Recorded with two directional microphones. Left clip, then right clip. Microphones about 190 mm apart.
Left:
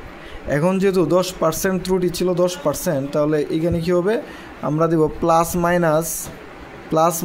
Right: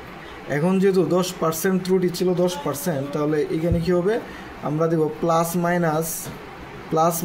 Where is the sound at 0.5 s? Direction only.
45° left (ahead or behind).